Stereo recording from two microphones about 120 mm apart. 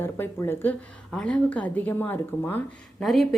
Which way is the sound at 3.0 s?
Centre (ahead or behind).